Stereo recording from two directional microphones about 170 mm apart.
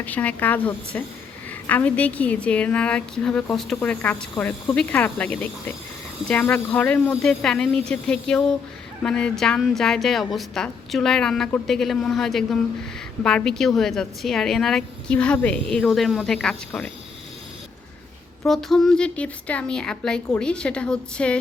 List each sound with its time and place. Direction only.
0.0 s a woman's voice: 10° left (ahead or behind)
18.4 s a woman's voice: centre (ahead or behind)